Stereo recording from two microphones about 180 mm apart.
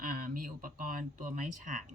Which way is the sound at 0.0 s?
50° right (ahead or behind).